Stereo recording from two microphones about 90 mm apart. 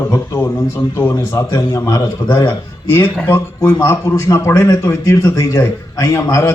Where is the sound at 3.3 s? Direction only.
20° left (ahead or behind).